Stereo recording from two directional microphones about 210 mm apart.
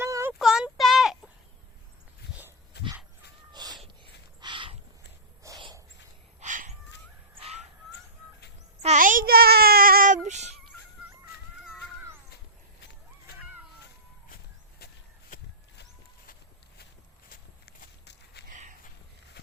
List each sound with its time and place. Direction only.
0.0 s child singing: 10° right (ahead or behind)
2.8 s dog: 50° left (ahead or behind)
3.5 s cat: 20° right (ahead or behind)
4.0 s wild animals: 20° right (ahead or behind)
5.4 s a sound: 20° right (ahead or behind)
6.4 s cat: 35° right (ahead or behind)
7.3 s crow: 30° right (ahead or behind)
8.8 s child singing: 35° right (ahead or behind)
10.2 s a sound: 35° right (ahead or behind)
17.2 s walk: 45° left (ahead or behind)
18.4 s a sound: 35° right (ahead or behind)